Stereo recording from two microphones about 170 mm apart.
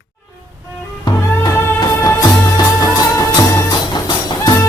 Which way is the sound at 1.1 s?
25° left (ahead or behind).